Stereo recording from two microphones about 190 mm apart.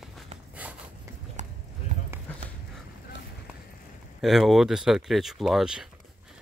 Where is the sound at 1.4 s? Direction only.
40° right (ahead or behind).